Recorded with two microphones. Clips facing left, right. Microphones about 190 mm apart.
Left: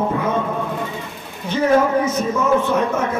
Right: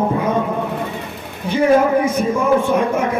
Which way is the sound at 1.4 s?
10° right (ahead or behind).